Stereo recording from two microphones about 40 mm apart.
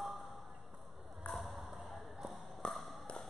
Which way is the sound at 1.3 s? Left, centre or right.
Centre.